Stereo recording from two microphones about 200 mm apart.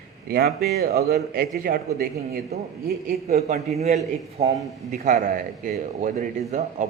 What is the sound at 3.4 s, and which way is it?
A man's voice, 35° right (ahead or behind).